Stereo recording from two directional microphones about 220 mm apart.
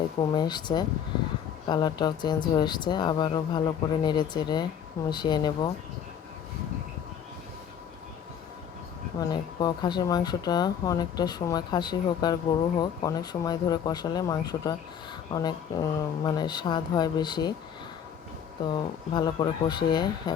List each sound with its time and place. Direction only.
0.2 s speech: 20° left (ahead or behind)
9.2 s speech: 20° left (ahead or behind)
18.7 s speech: 20° left (ahead or behind)